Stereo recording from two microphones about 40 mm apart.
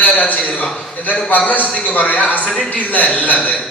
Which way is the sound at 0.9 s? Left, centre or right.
Left.